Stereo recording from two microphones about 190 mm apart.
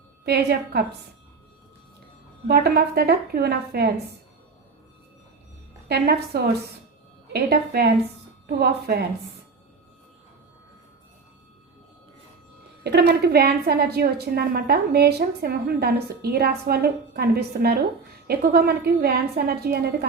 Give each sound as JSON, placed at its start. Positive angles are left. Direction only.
{"t": 0.3, "sound": "a woman's voice", "side_deg": -55}
{"t": 2.5, "sound": "a woman's voice", "side_deg": -55}
{"t": 5.9, "sound": "a woman's voice", "side_deg": -55}
{"t": 12.8, "sound": "a woman's voice", "side_deg": -60}